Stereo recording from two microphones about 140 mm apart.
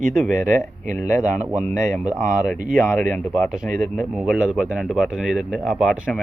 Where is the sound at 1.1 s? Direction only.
60° right (ahead or behind).